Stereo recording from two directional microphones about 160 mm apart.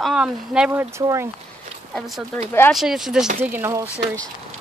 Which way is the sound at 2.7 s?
Centre (ahead or behind).